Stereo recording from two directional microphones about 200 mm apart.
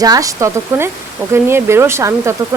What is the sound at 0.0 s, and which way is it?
Speech, 15° right (ahead or behind).